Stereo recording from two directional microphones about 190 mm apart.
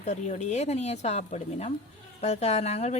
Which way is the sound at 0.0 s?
35° left (ahead or behind).